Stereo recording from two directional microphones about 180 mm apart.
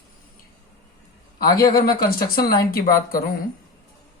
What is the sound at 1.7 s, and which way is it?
Speech, 55° left (ahead or behind).